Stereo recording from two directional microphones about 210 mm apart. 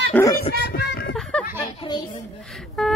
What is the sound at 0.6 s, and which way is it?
Music, 50° left (ahead or behind).